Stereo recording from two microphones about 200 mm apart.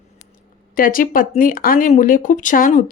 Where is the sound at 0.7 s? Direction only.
45° left (ahead or behind).